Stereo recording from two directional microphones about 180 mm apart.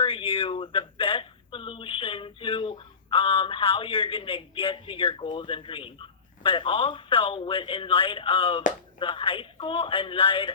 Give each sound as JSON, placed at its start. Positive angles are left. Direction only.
{"t": 0.0, "sound": "speech", "side_deg": 30}